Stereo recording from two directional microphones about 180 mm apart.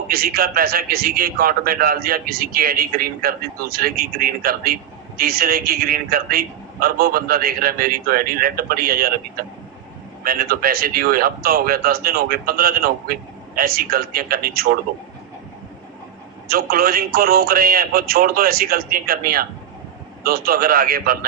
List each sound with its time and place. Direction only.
0.1 s a man's voice: 55° right (ahead or behind)
16.5 s a man's voice: 55° right (ahead or behind)